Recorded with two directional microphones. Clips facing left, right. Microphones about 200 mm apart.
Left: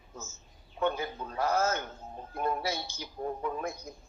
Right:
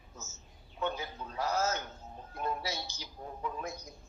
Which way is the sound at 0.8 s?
55° left (ahead or behind).